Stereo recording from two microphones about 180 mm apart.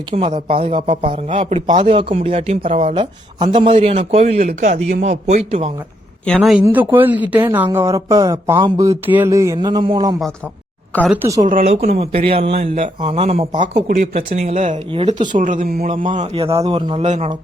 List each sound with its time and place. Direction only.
0.2 s a sound: 30° right (ahead or behind)
1.3 s speech: 40° right (ahead or behind)
6.2 s speech: centre (ahead or behind); by 9.0 s 25° right (ahead or behind)
9.0 s a sound: 10° right (ahead or behind)
11.1 s speech: 15° right (ahead or behind)
11.4 s speech: 40° right (ahead or behind)
14.9 s a sound: 30° right (ahead or behind)
15.4 s speech: 45° right (ahead or behind)
16.1 s speech: 35° right (ahead or behind)